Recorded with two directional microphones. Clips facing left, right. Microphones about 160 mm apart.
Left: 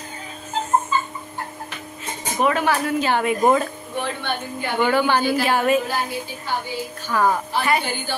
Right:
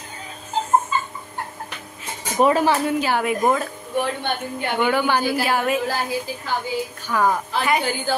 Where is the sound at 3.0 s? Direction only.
5° right (ahead or behind).